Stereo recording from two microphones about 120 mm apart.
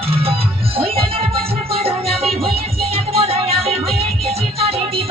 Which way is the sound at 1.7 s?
55° right (ahead or behind).